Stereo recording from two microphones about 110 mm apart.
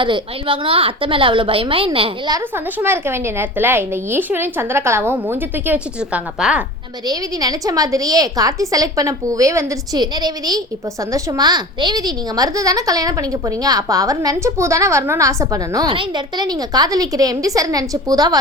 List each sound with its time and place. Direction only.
0.0 s a woman's voice: 50° right (ahead or behind)
2.7 s a woman's voice: 20° right (ahead or behind)
7.1 s a child's voice: 35° right (ahead or behind)
15.9 s a child's voice: 45° right (ahead or behind)